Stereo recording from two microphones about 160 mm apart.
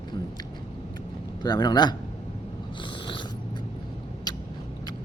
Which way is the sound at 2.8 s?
30° left (ahead or behind).